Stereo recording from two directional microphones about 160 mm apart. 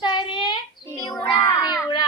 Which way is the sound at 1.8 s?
25° left (ahead or behind).